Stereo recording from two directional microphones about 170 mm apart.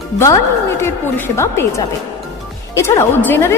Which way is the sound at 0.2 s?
15° left (ahead or behind).